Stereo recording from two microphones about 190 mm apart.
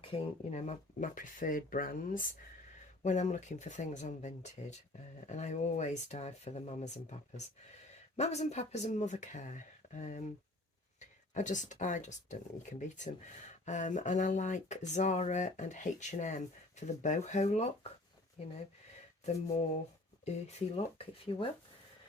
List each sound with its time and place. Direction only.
0.0 s speech: 35° left (ahead or behind)